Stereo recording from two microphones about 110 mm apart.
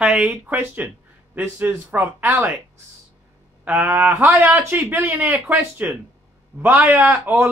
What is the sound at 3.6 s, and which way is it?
Speech, 15° right (ahead or behind).